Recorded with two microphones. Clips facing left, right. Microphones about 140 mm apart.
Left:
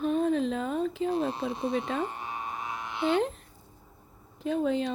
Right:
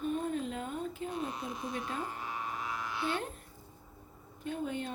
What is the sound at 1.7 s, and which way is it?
Speech, 85° left.